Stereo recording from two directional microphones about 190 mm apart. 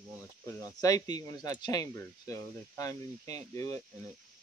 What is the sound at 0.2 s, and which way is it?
Speech, 15° left (ahead or behind).